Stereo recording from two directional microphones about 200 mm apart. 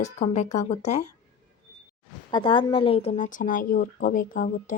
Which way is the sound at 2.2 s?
25° left (ahead or behind).